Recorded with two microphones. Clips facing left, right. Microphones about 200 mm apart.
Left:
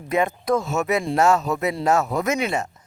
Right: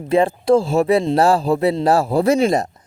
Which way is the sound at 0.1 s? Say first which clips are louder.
Right 7 dB; 30° right (ahead or behind).